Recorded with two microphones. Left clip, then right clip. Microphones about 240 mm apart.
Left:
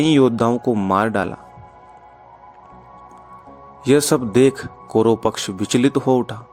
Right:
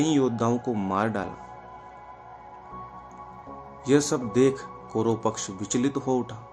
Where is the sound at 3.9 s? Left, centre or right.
Left.